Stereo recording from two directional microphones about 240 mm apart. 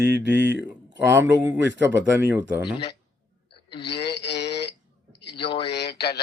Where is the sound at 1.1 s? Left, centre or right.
Centre.